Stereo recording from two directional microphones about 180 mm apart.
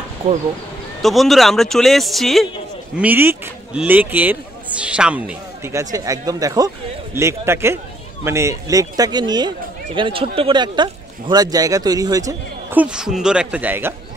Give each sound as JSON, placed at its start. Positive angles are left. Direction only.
{"t": 1.0, "sound": "speech", "side_deg": 0}
{"t": 3.0, "sound": "speech", "side_deg": -10}
{"t": 12.8, "sound": "speech", "side_deg": -5}